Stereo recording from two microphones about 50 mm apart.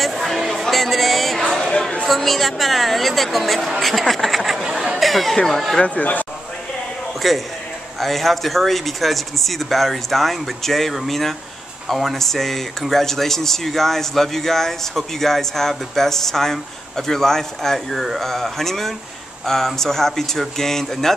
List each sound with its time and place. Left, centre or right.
0.0 s music: centre
1.5 s chatter: centre
2.0 s speech: centre
5.8 s speech: left
7.2 s a man's voice: centre